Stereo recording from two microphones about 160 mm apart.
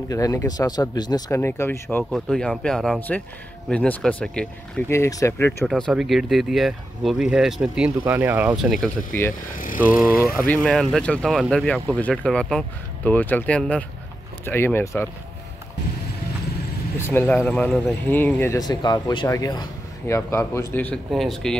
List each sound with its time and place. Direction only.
0.1 s speech: 20° left (ahead or behind)
2.0 s speech: centre (ahead or behind)
4.9 s speech: 20° left (ahead or behind)
5.7 s speech: centre (ahead or behind)
9.1 s speech: 15° left (ahead or behind)
9.8 s speech: 5° right (ahead or behind)
10.4 s speech: 10° left (ahead or behind)
17.0 s speech: 15° left (ahead or behind)
18.6 s speech: 25° left (ahead or behind); by 21.5 s centre (ahead or behind)